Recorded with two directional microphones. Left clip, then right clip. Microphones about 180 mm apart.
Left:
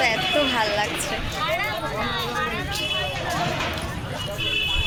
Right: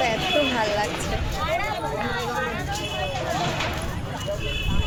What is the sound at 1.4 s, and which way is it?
Speech, 70° right (ahead or behind).